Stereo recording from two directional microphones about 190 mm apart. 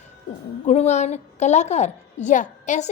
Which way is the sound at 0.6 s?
35° left (ahead or behind).